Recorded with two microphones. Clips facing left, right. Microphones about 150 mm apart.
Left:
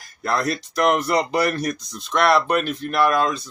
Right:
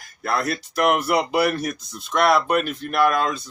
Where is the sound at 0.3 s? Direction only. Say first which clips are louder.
Left 1 dB; 5° right (ahead or behind).